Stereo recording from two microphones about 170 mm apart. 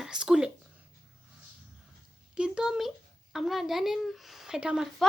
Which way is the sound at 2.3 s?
5° right (ahead or behind).